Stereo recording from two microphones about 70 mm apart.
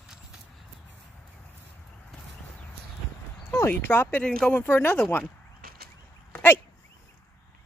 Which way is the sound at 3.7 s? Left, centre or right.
Left.